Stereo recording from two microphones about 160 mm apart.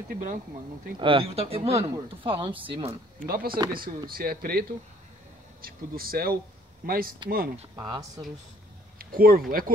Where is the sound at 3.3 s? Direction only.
60° right (ahead or behind).